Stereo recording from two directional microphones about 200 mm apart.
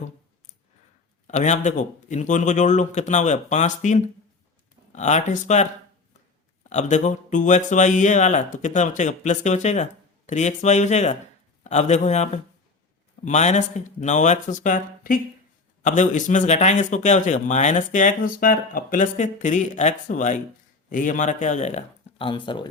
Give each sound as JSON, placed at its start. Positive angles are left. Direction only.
{"t": 1.3, "sound": "a man's voice", "side_deg": 35}
{"t": 6.7, "sound": "a man's voice", "side_deg": 35}